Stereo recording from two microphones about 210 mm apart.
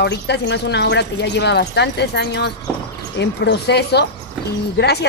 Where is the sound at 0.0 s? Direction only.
55° left (ahead or behind).